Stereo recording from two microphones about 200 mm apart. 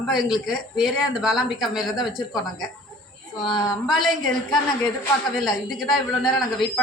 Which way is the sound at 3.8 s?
Centre (ahead or behind).